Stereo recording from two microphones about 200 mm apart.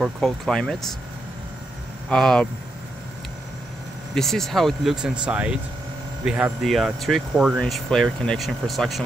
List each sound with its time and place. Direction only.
0.0 s speech: centre (ahead or behind)
2.0 s speech: 5° left (ahead or behind)
4.1 s speech: centre (ahead or behind)